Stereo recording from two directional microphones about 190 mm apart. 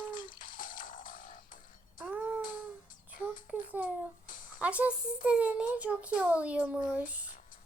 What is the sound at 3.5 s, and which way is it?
A child's voice, 10° right (ahead or behind).